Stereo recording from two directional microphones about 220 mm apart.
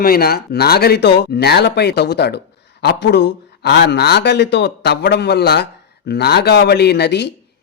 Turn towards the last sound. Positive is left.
turn(degrees=50)  # may be behind; listen again after turning